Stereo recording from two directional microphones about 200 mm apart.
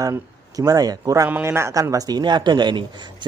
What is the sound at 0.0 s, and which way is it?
A man's voice, 15° right (ahead or behind).